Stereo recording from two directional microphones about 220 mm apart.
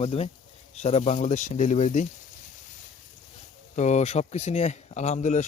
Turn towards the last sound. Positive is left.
turn(degrees=35)  # may be behind; listen again after turning